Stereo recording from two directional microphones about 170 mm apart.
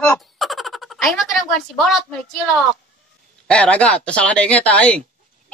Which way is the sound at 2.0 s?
5° left (ahead or behind).